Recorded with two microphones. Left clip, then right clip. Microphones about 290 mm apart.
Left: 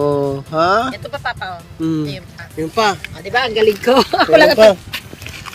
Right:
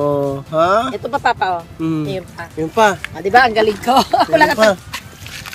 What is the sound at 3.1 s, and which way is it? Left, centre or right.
Speech, right.